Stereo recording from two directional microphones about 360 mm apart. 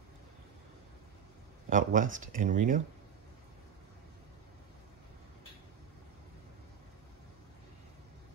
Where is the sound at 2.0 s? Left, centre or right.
Right.